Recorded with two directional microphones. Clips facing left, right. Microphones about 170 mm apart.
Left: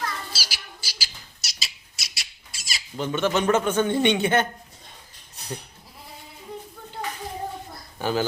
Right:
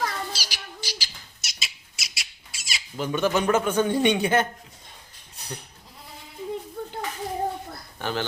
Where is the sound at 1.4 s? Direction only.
35° left (ahead or behind).